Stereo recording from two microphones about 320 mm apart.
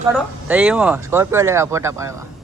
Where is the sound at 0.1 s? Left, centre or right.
Centre.